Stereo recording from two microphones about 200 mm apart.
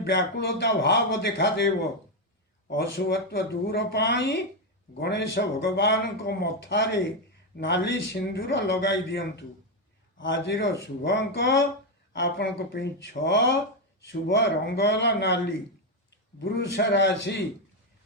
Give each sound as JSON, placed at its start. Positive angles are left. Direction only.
{"t": 0.0, "sound": "speech", "side_deg": 60}
{"t": 3.3, "sound": "speech", "side_deg": 55}